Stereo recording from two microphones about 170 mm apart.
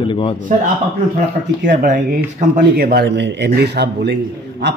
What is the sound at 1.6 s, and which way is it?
Speech, 50° right (ahead or behind).